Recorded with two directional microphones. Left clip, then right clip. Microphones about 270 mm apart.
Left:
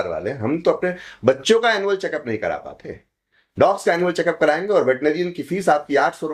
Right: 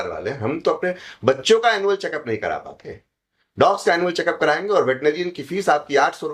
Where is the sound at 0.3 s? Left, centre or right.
Left.